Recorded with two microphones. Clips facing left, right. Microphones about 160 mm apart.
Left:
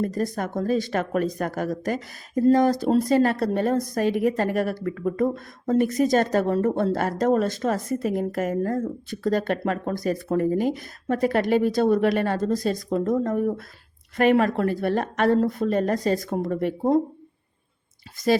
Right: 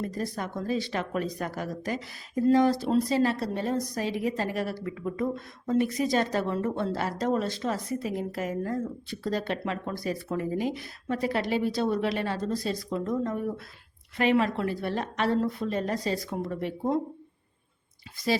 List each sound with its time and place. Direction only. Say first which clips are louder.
0.0 s speech: left 6 dB; 45° left (ahead or behind)
18.2 s speech: left 6 dB; 45° left (ahead or behind)